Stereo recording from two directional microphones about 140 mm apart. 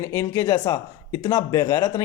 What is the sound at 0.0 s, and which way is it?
Speech, 20° left (ahead or behind).